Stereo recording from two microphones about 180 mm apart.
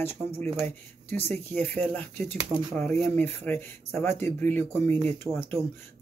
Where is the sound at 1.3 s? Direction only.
10° left (ahead or behind).